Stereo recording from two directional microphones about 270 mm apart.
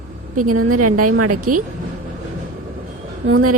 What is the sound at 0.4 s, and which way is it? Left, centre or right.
Speech, right.